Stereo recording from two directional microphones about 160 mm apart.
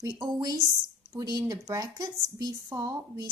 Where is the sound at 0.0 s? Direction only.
25° right (ahead or behind).